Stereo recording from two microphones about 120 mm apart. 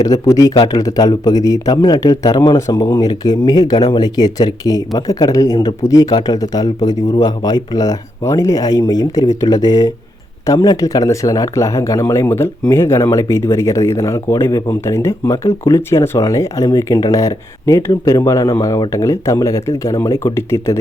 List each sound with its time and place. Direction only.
0.0 s speech: 30° left (ahead or behind)